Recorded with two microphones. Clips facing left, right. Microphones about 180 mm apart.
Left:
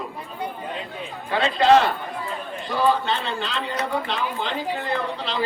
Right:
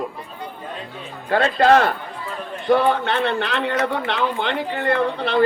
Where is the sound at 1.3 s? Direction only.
50° right (ahead or behind).